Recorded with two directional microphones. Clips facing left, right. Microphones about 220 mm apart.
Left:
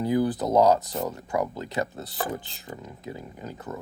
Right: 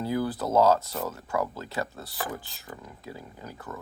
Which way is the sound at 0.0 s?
20° left (ahead or behind).